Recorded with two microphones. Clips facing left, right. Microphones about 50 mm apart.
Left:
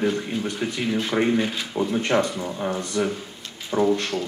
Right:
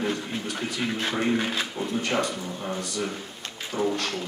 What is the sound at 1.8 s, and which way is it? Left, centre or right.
A man's voice, left.